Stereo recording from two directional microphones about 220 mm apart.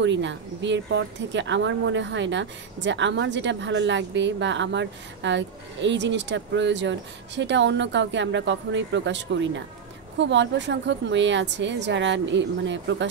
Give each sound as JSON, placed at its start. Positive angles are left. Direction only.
{"t": 0.0, "sound": "speech", "side_deg": -55}